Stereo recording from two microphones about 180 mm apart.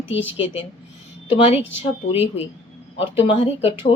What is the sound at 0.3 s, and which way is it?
Speech, 35° left (ahead or behind).